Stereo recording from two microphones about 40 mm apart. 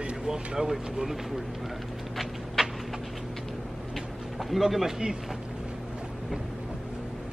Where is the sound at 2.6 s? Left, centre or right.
Centre.